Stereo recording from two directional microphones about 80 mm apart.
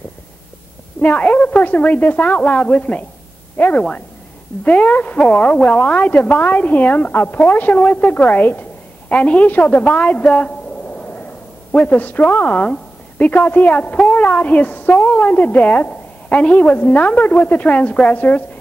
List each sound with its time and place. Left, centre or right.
1.0 s a woman's voice: centre